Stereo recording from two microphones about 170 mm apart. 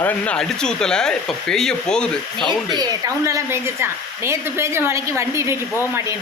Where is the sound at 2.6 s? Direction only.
20° right (ahead or behind).